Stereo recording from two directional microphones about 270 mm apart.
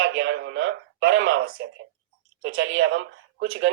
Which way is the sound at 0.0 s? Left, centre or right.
Right.